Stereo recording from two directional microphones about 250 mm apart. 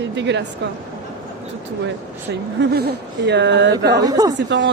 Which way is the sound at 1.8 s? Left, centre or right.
Right.